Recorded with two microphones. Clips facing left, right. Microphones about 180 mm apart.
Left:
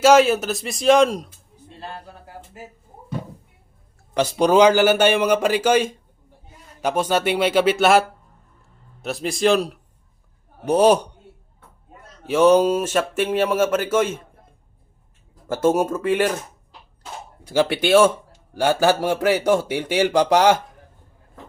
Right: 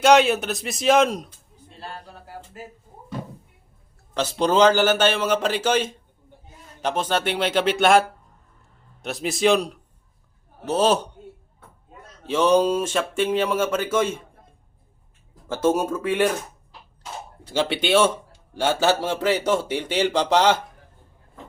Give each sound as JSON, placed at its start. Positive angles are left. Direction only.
{"t": 0.0, "sound": "a man's voice", "side_deg": 0}
{"t": 1.8, "sound": "speech", "side_deg": 20}
{"t": 4.1, "sound": "a man's voice", "side_deg": 15}
{"t": 10.7, "sound": "a man's voice", "side_deg": 15}
{"t": 12.2, "sound": "a man's voice", "side_deg": 10}
{"t": 15.4, "sound": "a man's voice", "side_deg": 10}
{"t": 17.4, "sound": "a man's voice", "side_deg": 10}